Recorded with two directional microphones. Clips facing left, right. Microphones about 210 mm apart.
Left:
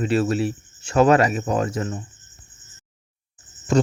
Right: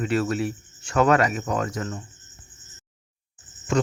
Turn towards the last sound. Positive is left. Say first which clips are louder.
# left 4 dB
turn(degrees=35)  # may be behind; listen again after turning